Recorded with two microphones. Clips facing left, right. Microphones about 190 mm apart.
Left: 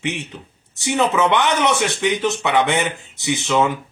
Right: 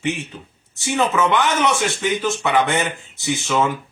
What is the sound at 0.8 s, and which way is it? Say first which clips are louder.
A man's voice: left 1 dB; 20° left (ahead or behind).